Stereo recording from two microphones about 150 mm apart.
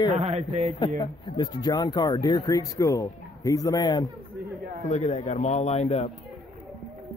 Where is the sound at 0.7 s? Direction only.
25° left (ahead or behind).